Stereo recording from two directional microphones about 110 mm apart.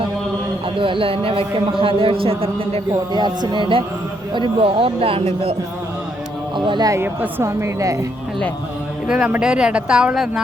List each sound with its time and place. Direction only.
0.8 s speech: 55° right (ahead or behind)
2.9 s speech: 40° right (ahead or behind); by 5.5 s 65° right (ahead or behind)
6.7 s speech: 40° right (ahead or behind)
6.9 s a woman's voice: 20° right (ahead or behind)
9.0 s a woman's voice: 5° right (ahead or behind)